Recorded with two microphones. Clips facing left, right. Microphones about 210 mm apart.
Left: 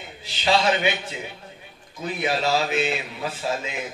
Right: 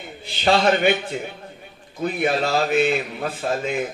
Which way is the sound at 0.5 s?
50° right (ahead or behind).